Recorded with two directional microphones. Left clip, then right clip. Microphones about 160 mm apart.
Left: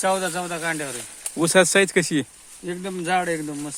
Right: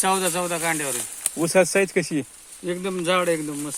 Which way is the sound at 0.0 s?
5° left (ahead or behind).